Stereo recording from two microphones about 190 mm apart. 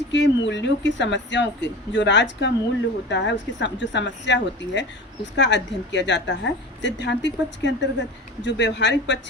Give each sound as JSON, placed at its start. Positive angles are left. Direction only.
{"t": 0.1, "sound": "a woman's voice", "side_deg": 70}